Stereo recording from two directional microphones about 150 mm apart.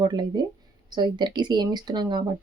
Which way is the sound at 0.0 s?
30° right (ahead or behind).